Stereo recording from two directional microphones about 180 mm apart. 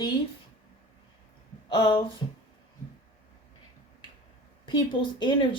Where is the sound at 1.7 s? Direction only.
25° left (ahead or behind).